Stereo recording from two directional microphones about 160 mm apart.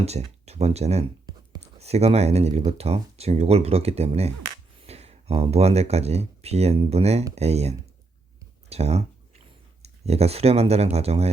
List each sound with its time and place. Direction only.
0.0 s speech: 40° right (ahead or behind)
8.7 s a sound: 40° right (ahead or behind)
9.8 s speech: 40° right (ahead or behind)